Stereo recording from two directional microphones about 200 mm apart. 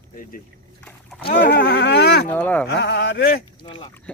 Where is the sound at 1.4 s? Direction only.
50° left (ahead or behind).